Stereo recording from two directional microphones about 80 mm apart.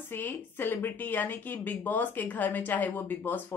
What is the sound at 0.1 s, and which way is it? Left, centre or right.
A woman's voice, left.